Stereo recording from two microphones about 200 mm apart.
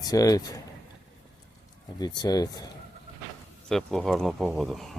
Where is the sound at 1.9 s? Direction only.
20° left (ahead or behind).